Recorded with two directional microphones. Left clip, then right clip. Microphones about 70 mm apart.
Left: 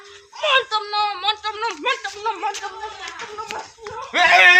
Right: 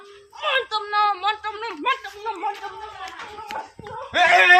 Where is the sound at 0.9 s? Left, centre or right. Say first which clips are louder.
Right 1 dB; centre.